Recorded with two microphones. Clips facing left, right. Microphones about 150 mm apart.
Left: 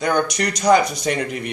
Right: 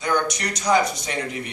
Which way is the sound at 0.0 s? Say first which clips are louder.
Left 4 dB; 65° left (ahead or behind).